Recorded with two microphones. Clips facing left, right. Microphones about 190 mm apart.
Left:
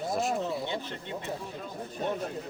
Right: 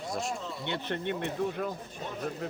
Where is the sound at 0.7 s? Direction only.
65° right (ahead or behind).